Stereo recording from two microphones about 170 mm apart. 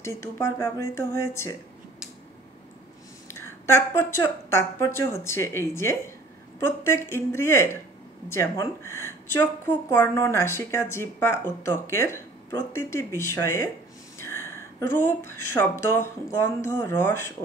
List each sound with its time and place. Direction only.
0.0 s speech: 15° left (ahead or behind)
3.3 s speech: 15° left (ahead or behind)